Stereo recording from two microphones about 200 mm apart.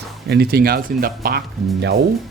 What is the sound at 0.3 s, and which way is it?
Speech, 50° right (ahead or behind).